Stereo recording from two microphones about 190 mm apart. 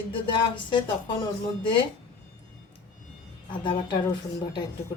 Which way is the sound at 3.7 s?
25° left (ahead or behind).